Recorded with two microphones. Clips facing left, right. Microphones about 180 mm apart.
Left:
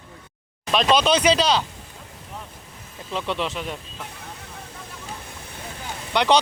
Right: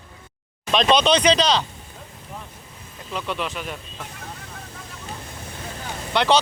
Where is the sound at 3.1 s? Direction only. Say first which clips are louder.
Left 2 dB; 25° left (ahead or behind).